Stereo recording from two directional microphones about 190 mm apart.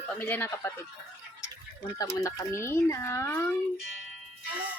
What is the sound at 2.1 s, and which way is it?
Speech, 15° left (ahead or behind).